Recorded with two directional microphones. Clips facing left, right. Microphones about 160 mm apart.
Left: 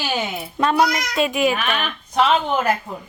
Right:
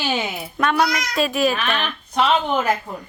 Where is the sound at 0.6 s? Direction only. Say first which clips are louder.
Left 2 dB; 30° left (ahead or behind).